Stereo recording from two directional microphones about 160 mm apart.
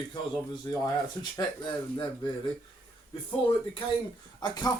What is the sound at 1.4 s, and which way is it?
Speech, 30° left (ahead or behind).